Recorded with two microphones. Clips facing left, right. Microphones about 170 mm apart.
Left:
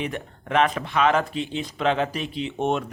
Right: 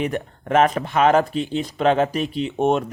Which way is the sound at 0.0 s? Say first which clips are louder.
Right 5 dB; 40° right (ahead or behind).